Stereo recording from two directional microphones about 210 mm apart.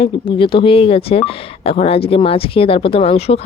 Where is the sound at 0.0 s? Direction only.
25° left (ahead or behind).